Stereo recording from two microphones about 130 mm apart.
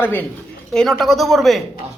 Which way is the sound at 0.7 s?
5° left (ahead or behind).